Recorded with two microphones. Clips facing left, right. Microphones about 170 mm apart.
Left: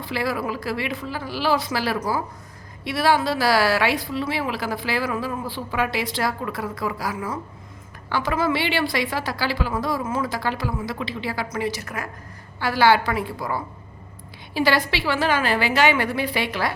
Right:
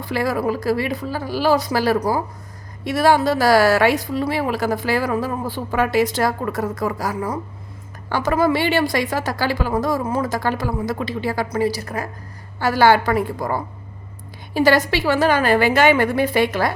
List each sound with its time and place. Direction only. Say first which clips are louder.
0.0 s a woman's voice: right 5 dB; 45° right (ahead or behind)
11.4 s a woman's voice: right 6 dB; 35° right (ahead or behind)
12.5 s a woman's voice: right 3 dB; 45° right (ahead or behind)